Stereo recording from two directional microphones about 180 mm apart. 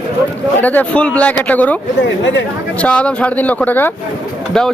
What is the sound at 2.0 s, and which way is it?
Speech, 90° left.